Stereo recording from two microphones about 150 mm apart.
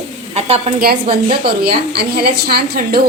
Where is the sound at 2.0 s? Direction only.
90° right.